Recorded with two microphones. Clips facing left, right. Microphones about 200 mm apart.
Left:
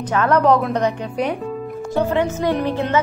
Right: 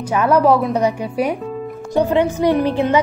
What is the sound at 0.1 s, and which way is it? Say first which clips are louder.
Speech: right 2 dB; 10° right (ahead or behind).